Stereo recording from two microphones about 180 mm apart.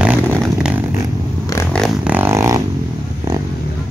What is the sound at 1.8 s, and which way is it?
Vehicle, 10° right (ahead or behind).